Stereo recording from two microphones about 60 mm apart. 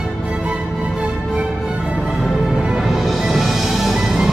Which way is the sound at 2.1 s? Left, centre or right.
Centre.